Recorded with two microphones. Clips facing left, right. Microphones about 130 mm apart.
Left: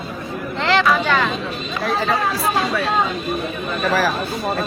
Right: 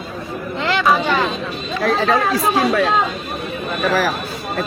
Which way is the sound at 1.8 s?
90° right.